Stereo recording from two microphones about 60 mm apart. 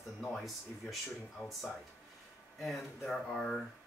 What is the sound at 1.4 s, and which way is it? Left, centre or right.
Speech, left.